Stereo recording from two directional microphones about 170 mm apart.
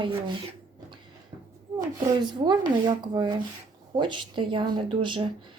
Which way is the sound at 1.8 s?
25° right (ahead or behind).